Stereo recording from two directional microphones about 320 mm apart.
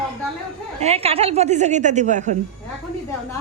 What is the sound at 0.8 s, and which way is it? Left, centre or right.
A woman's voice, centre.